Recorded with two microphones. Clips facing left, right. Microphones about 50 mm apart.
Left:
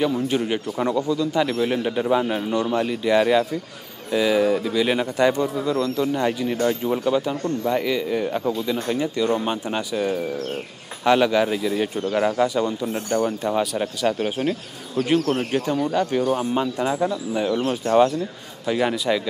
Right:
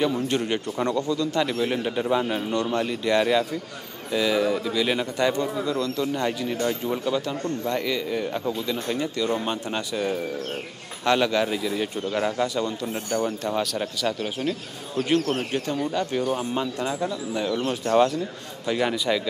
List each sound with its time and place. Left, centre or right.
0.0 s speech: centre
14.1 s speech: left
15.0 s speech: centre
15.3 s speech: centre